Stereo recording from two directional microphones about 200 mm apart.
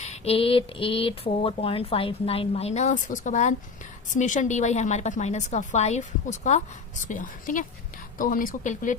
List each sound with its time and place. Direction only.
0.0 s a woman's voice: 30° left (ahead or behind)